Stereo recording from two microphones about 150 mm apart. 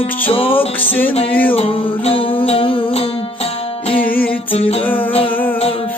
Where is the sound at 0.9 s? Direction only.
10° left (ahead or behind).